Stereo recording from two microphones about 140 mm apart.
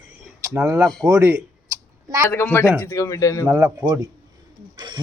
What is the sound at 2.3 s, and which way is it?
Speech, 15° left (ahead or behind).